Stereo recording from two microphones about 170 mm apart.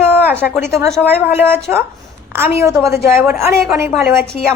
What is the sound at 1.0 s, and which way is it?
A woman's voice, 10° right (ahead or behind).